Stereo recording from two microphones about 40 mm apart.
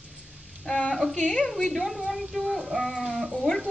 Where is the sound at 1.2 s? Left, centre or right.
Centre.